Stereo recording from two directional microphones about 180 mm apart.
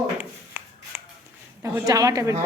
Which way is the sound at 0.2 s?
10° right (ahead or behind).